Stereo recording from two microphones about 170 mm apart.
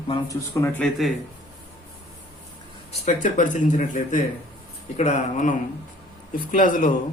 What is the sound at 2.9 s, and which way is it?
Speech, 45° left (ahead or behind).